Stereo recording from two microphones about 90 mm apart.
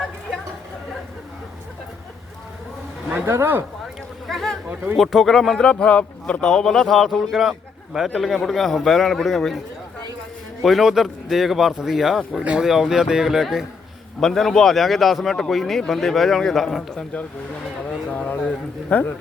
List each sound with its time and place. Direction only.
3.2 s speech: 30° right (ahead or behind)
4.3 s boat: 5° left (ahead or behind)
4.9 s a man's voice: centre (ahead or behind)
10.6 s a man's voice: centre (ahead or behind); by 19.1 s 15° left (ahead or behind)